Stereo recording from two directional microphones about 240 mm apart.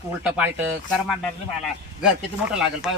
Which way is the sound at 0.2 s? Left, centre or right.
Centre.